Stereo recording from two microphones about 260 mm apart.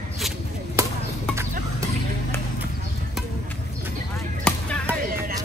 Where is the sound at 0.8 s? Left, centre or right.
Centre.